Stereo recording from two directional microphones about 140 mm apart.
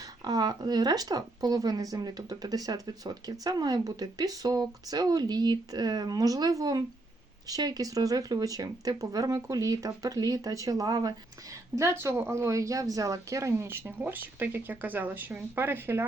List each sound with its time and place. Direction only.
0.3 s speech: 30° right (ahead or behind)